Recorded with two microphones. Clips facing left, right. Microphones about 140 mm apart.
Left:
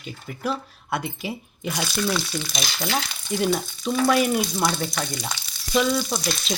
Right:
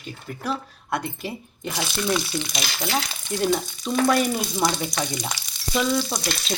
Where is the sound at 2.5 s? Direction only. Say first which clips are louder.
Left 1 dB; centre (ahead or behind).